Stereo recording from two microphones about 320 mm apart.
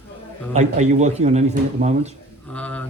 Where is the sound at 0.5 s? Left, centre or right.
Right.